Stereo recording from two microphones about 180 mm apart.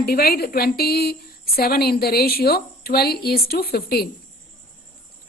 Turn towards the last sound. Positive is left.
turn(degrees=60)  # may be behind; listen again after turning